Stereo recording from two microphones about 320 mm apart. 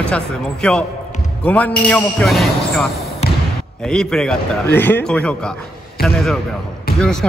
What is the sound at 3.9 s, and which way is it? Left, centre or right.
Speech, centre.